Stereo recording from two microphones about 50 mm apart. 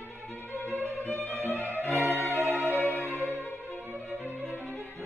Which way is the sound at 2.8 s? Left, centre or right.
Left.